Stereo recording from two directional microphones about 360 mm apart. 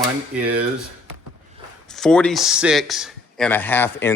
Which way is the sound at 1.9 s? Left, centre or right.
Centre.